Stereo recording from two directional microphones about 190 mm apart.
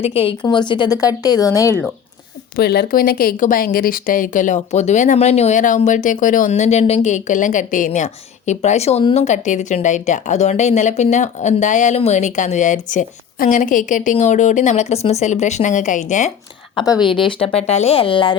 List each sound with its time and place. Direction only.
0.0 s speech: 30° left (ahead or behind)
2.6 s speech: 60° left (ahead or behind); by 16.3 s 40° left (ahead or behind)
16.7 s speech: 20° left (ahead or behind)